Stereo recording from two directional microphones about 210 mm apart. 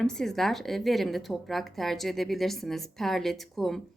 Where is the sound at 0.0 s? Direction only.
5° left (ahead or behind).